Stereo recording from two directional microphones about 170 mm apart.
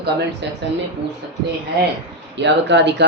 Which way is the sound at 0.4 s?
90° right.